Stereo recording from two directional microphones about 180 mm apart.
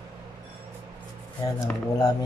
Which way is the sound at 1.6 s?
20° left (ahead or behind).